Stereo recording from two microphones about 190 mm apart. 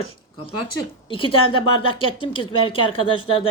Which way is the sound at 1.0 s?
25° left (ahead or behind).